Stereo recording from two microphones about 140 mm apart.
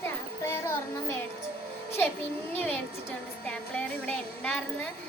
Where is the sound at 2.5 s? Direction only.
10° left (ahead or behind).